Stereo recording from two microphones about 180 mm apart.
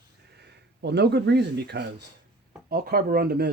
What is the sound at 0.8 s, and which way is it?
Speech, 70° right (ahead or behind).